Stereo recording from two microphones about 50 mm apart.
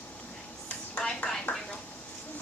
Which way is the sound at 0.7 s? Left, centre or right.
Left.